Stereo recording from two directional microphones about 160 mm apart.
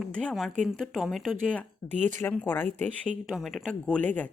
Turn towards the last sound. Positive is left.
turn(degrees=10)  # may be behind; listen again after turning